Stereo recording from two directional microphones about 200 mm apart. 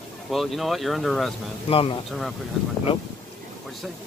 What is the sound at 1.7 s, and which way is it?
Speech, 25° left (ahead or behind).